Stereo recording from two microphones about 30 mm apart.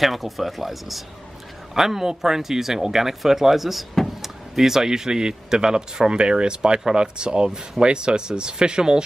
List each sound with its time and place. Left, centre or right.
0.0 s speech: centre; by 8.8 s right